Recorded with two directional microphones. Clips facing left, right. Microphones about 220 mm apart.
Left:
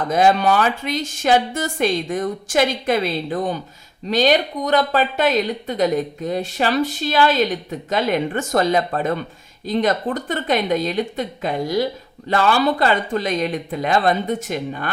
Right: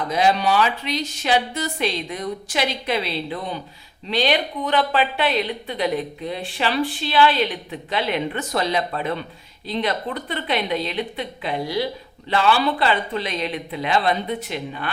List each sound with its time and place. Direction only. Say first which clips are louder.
0.1 s a woman's voice: left 3 dB; 50° left (ahead or behind)